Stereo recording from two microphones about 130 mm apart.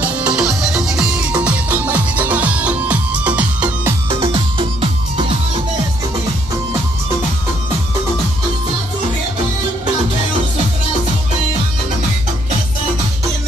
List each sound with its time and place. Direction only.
0.4 s music: 5° right (ahead or behind)
4.2 s music: 40° right (ahead or behind)